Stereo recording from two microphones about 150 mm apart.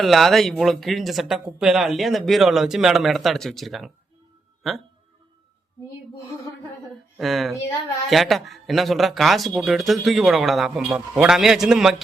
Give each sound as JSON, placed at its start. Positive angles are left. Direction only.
{"t": 0.0, "sound": "speech", "side_deg": 0}
{"t": 7.2, "sound": "speech", "side_deg": 0}